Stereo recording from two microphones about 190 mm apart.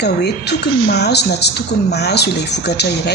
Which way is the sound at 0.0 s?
60° left (ahead or behind).